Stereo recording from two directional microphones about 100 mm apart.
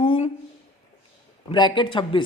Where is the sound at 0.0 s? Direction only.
60° left (ahead or behind).